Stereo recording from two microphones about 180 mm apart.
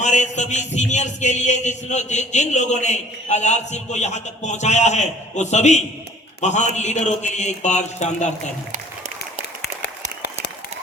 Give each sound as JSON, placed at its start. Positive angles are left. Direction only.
{"t": 0.0, "sound": "a man's voice", "side_deg": 40}